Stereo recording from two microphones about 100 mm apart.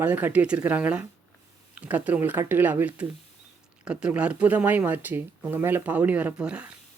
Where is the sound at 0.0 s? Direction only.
20° right (ahead or behind).